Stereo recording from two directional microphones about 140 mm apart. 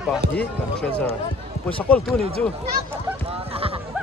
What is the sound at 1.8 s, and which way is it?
Speech, 10° left (ahead or behind).